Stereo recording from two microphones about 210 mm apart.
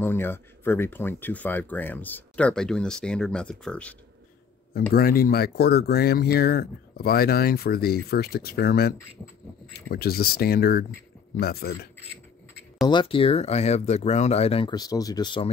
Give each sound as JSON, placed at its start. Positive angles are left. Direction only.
{"t": 0.0, "sound": "speech", "side_deg": 10}
{"t": 4.9, "sound": "speech", "side_deg": 45}
{"t": 12.8, "sound": "speech", "side_deg": 25}